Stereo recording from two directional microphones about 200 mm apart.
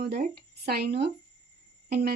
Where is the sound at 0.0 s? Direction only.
55° right (ahead or behind).